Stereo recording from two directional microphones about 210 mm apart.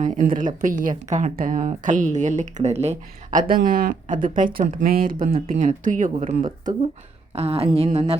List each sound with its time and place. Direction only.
0.0 s a woman's voice: 35° right (ahead or behind)
7.3 s a woman's voice: 30° right (ahead or behind)